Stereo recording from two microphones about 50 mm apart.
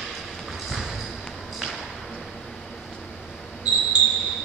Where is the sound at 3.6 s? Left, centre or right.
Centre.